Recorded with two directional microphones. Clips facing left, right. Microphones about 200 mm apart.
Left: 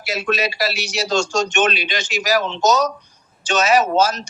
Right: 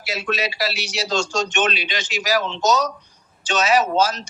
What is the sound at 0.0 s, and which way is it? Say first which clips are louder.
Speech: left 3 dB; 45° left (ahead or behind).